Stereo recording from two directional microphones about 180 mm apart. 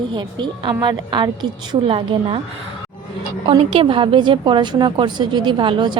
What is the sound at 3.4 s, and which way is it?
A woman's voice, 30° right (ahead or behind).